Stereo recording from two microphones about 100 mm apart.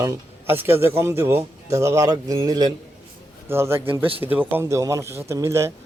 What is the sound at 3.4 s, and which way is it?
A man's voice, 25° right (ahead or behind).